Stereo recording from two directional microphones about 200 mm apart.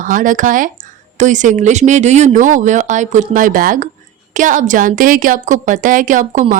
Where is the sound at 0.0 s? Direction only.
40° right (ahead or behind).